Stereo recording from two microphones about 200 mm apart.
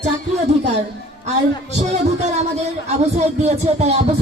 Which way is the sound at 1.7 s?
35° right (ahead or behind).